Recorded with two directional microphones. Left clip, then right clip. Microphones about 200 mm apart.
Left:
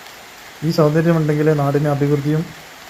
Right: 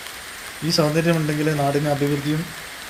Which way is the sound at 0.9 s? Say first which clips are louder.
Left 3 dB; 10° right (ahead or behind).